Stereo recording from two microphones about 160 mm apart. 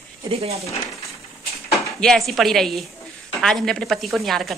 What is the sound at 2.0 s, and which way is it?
Speech, centre (ahead or behind).